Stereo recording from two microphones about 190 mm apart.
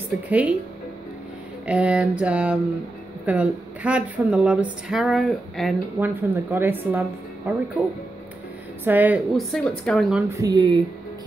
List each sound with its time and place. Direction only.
0.3 s a woman's voice: 5° right (ahead or behind)
1.7 s a woman's voice: 5° right (ahead or behind)
5.9 s a woman's voice: 10° right (ahead or behind)
8.8 s speech: 10° right (ahead or behind)
10.3 s speech: 20° right (ahead or behind)